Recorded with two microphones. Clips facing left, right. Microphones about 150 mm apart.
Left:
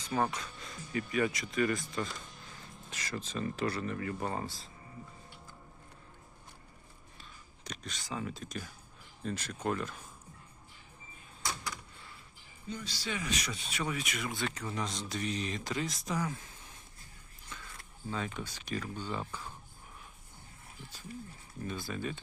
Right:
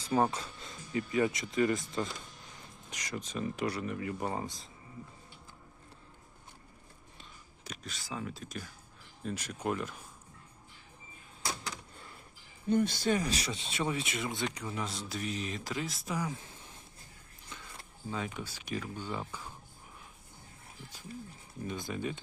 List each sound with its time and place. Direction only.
0.3 s speech: 25° right (ahead or behind)
2.9 s speech: 15° right (ahead or behind)
7.6 s speech: 5° right (ahead or behind)
12.6 s speech: 55° right (ahead or behind); by 16.4 s 10° right (ahead or behind)
17.5 s a sound: 20° right (ahead or behind)
18.1 s speech: 10° right (ahead or behind)
21.6 s speech: 20° right (ahead or behind)